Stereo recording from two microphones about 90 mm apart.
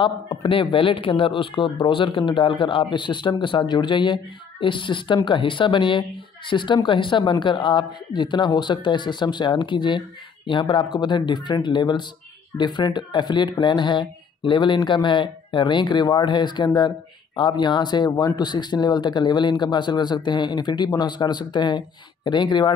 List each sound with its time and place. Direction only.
0.0 s speech: 70° left (ahead or behind)